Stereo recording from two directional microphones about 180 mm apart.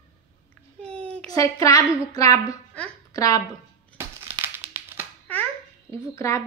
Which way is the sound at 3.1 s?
20° left (ahead or behind).